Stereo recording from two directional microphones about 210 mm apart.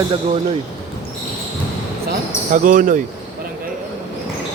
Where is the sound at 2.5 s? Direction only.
40° right (ahead or behind).